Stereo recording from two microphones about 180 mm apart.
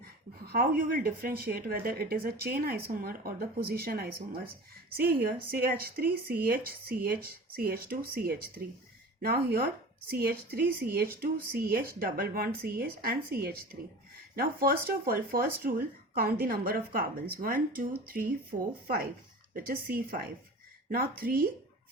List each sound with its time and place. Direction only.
0.5 s a woman's voice: 50° right (ahead or behind)